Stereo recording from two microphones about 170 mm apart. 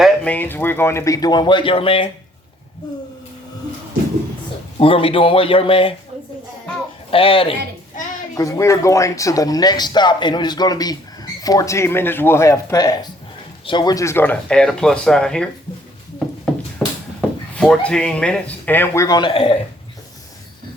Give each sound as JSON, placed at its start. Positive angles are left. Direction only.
{"t": 0.0, "sound": "speech", "side_deg": 10}
{"t": 4.8, "sound": "speech", "side_deg": 30}
{"t": 7.1, "sound": "speech", "side_deg": 35}
{"t": 8.4, "sound": "speech", "side_deg": 20}
{"t": 16.7, "sound": "speech", "side_deg": 5}